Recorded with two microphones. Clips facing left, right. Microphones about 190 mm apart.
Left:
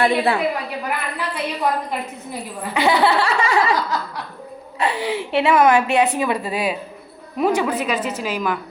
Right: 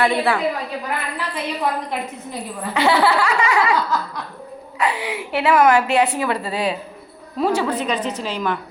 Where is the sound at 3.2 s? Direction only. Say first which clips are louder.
Even; 30° left (ahead or behind).